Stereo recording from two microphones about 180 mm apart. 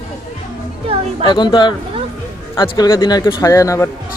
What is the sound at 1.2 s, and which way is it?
A man's voice, 25° left (ahead or behind).